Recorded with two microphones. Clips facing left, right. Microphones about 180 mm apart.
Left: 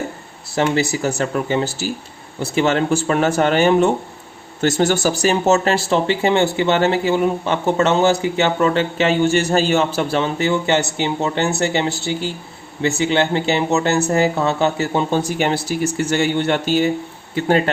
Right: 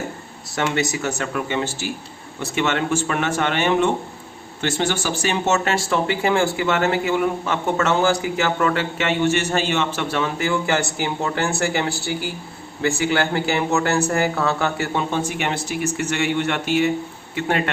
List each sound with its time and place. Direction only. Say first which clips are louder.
0.5 s speech: left 4 dB; 30° left (ahead or behind)